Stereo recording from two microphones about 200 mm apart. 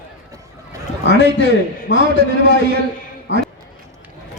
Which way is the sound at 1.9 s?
65° left (ahead or behind).